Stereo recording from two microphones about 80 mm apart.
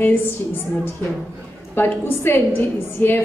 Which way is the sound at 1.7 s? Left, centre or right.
Left.